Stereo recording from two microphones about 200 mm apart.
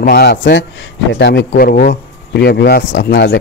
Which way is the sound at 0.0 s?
55° left (ahead or behind).